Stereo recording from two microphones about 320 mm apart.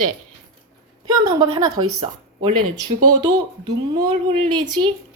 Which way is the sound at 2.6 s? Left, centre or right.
Right.